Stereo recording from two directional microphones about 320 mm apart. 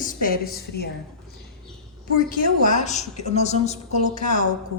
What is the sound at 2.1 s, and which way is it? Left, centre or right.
A woman's voice, left.